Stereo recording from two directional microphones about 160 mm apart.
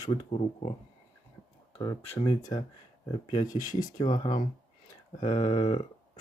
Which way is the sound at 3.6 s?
55° left (ahead or behind).